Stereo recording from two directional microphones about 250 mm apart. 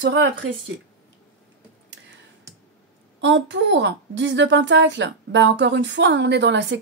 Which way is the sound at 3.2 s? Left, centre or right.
Right.